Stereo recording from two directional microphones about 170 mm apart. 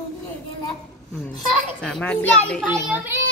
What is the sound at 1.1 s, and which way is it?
A child's voice, centre (ahead or behind).